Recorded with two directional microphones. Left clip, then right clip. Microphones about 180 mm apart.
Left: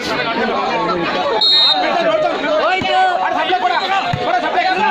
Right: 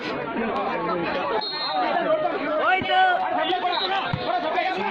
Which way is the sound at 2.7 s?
25° left (ahead or behind).